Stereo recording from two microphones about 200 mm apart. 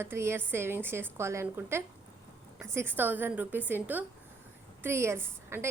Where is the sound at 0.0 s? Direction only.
10° right (ahead or behind).